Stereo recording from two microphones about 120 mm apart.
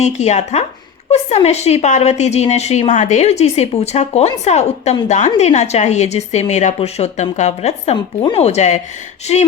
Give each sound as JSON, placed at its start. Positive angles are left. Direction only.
{"t": 0.0, "sound": "a woman's voice", "side_deg": 70}
{"t": 6.7, "sound": "a woman's voice", "side_deg": 60}
{"t": 7.9, "sound": "speech", "side_deg": 40}
{"t": 8.4, "sound": "a woman's voice", "side_deg": 65}